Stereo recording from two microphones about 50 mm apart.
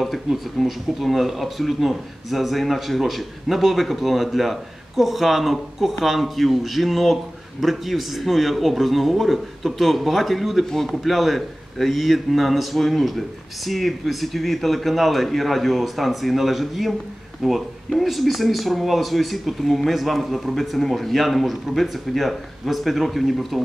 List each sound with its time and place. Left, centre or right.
0.0 s speech: centre